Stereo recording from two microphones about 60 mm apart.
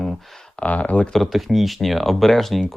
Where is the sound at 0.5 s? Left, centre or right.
Left.